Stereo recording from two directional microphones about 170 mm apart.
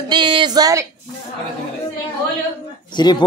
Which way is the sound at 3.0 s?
25° left (ahead or behind).